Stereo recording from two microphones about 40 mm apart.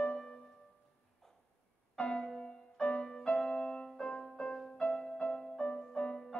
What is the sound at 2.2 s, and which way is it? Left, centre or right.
Music, centre.